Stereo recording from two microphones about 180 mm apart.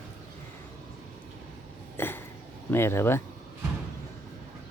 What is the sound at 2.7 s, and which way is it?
Speech, 15° left (ahead or behind).